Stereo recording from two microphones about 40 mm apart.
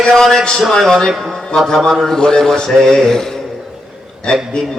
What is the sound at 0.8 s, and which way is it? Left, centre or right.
Speech, centre.